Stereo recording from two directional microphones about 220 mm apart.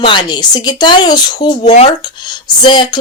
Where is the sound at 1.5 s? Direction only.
30° left (ahead or behind).